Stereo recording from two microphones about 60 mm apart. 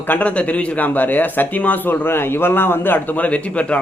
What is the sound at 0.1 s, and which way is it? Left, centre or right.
Speech, left.